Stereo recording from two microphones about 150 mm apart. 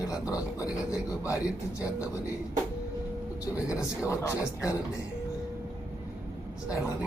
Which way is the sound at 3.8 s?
20° left (ahead or behind).